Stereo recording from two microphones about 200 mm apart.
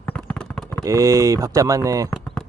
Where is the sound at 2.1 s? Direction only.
5° left (ahead or behind).